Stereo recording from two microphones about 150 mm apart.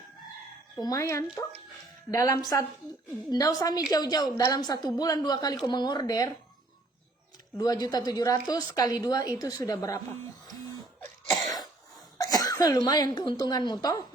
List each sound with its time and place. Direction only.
0.8 s a woman's voice: 25° left (ahead or behind)
7.6 s a woman's voice: 25° left (ahead or behind)
12.1 s speech: 25° left (ahead or behind)